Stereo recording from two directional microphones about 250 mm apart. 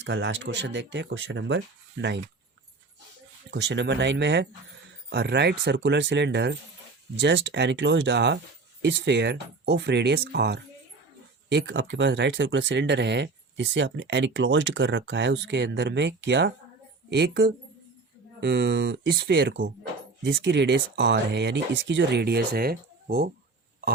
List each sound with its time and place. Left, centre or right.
0.0 s speech: right
3.5 s speech: right